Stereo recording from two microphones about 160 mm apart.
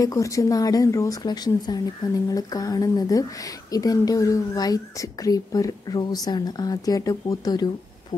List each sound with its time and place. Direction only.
0.0 s speech: 20° left (ahead or behind)